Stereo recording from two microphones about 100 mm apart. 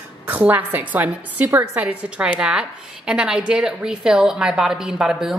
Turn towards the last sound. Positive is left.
turn(degrees=-5)  # may be behind; listen again after turning